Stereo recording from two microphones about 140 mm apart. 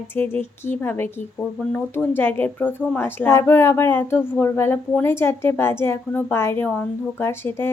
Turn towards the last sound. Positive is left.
turn(degrees=15)  # may be behind; listen again after turning